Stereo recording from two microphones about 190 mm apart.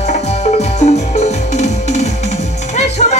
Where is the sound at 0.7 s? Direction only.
35° left (ahead or behind).